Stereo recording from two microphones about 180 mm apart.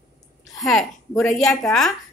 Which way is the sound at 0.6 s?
Centre (ahead or behind).